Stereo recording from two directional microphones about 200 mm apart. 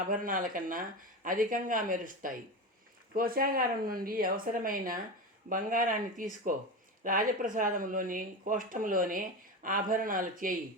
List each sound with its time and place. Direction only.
0.1 s speech: 45° right (ahead or behind)